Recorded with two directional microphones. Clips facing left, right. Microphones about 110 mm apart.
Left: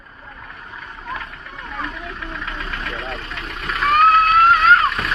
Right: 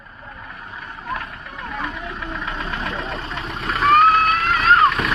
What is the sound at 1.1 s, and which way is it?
Engine knocking, 10° right (ahead or behind).